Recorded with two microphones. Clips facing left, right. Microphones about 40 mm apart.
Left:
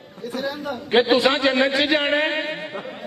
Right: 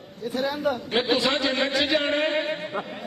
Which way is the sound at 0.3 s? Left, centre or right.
Centre.